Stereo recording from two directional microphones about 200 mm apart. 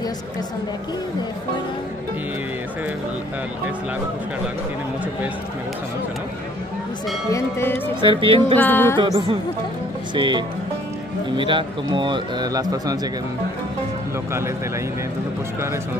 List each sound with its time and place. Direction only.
7.2 s speech: 15° left (ahead or behind)
8.0 s a man's voice: 25° right (ahead or behind)
8.5 s speech: 10° left (ahead or behind)
8.9 s a man's voice: 25° right (ahead or behind)